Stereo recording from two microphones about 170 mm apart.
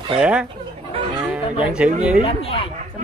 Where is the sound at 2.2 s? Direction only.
35° left (ahead or behind).